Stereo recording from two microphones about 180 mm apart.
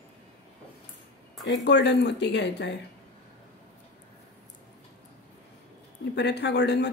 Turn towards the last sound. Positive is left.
turn(degrees=70)  # may be behind; listen again after turning